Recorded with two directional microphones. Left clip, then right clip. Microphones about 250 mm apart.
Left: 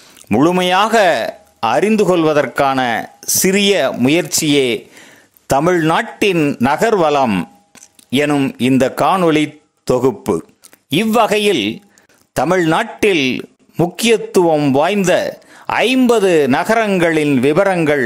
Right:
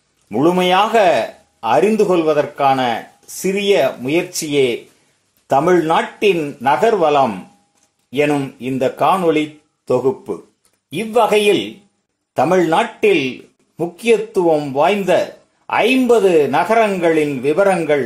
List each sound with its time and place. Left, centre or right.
0.3 s a man's voice: left